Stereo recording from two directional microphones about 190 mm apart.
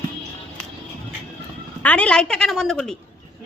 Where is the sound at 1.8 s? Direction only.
5° left (ahead or behind).